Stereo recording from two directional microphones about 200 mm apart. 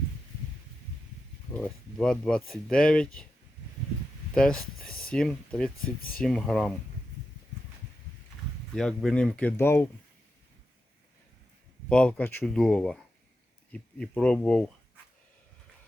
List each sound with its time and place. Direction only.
1.5 s speech: 5° left (ahead or behind)
4.4 s speech: 5° left (ahead or behind)
8.7 s speech: 5° left (ahead or behind)
11.9 s speech: 5° left (ahead or behind)